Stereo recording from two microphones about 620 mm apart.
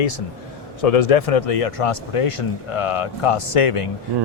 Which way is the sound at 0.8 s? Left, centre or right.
Left.